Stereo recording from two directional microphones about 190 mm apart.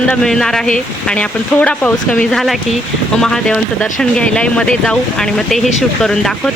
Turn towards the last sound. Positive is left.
turn(degrees=5)  # may be behind; listen again after turning